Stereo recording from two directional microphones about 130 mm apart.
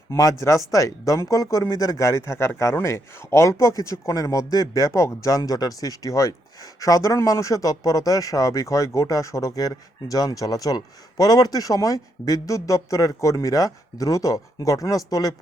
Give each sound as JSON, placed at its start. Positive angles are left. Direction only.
{"t": 0.1, "sound": "speech", "side_deg": 25}